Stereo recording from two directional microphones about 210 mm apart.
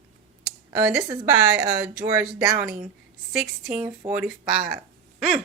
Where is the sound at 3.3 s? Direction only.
Centre (ahead or behind).